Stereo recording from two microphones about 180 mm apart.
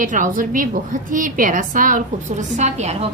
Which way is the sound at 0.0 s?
45° right (ahead or behind).